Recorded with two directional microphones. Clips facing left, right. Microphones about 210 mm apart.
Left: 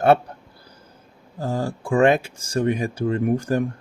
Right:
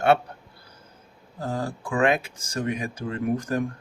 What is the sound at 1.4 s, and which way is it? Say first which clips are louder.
Speech: left 4 dB; 30° left (ahead or behind).